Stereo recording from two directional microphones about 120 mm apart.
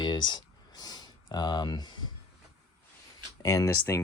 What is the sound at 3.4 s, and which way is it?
Speech, 30° left (ahead or behind).